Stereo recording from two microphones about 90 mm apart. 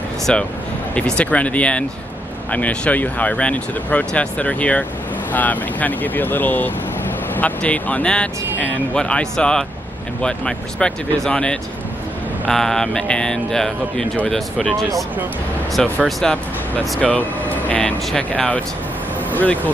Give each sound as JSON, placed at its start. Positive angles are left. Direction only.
{"t": 0.3, "sound": "speech", "side_deg": 10}